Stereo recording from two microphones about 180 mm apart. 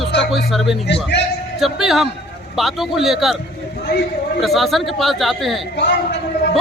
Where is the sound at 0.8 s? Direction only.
70° left (ahead or behind).